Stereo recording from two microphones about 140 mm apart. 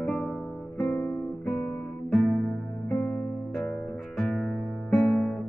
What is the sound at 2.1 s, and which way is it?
Music, centre (ahead or behind).